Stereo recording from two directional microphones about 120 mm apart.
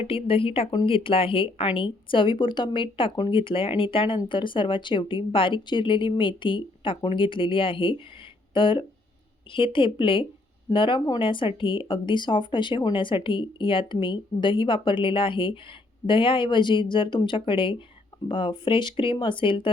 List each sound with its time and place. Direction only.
0.1 s speech: 50° left (ahead or behind)